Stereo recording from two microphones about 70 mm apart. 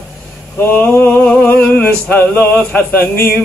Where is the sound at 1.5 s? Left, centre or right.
Left.